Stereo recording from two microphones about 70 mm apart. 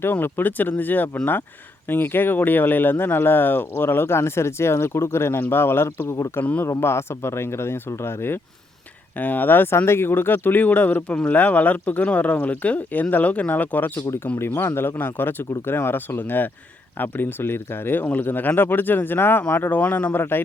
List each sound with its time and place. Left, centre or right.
0.0 s speech: left
6.4 s speech: centre
6.7 s speech: left
9.1 s speech: left